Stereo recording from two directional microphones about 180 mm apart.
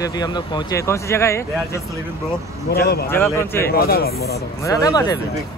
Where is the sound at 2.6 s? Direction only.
60° left (ahead or behind).